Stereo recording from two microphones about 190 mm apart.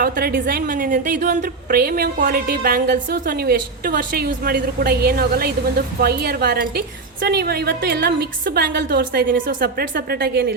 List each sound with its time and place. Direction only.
0.0 s a woman's voice: 50° right (ahead or behind)